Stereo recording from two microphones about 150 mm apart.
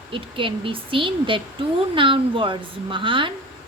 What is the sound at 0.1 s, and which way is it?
Speech, 35° right (ahead or behind).